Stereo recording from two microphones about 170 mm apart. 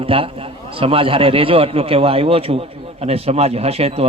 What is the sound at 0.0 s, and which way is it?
A man's voice, 35° right (ahead or behind).